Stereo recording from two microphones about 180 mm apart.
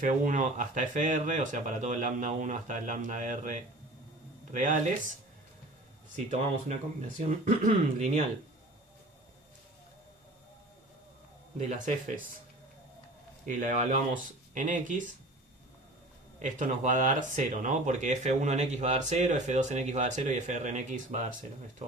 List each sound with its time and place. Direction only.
0.0 s speech: 45° right (ahead or behind)
6.1 s speech: 35° right (ahead or behind)
11.5 s speech: 40° right (ahead or behind)
13.4 s speech: 45° right (ahead or behind)
16.4 s speech: 45° right (ahead or behind)